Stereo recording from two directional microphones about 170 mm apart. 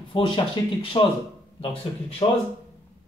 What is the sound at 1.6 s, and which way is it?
Speech, 35° left (ahead or behind).